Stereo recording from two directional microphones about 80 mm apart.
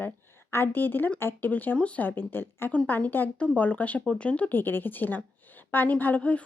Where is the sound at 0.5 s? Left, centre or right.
Left.